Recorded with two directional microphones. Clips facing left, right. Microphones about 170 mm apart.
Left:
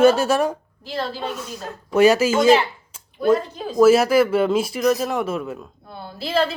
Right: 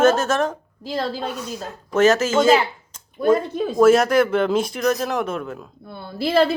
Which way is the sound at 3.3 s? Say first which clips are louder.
Right 1 dB; 55° right (ahead or behind).